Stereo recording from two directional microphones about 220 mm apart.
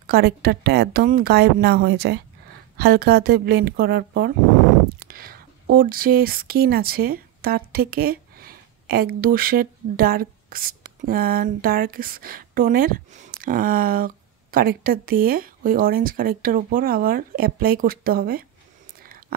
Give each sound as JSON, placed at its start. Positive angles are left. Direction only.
{"t": 0.0, "sound": "a woman's voice", "side_deg": -45}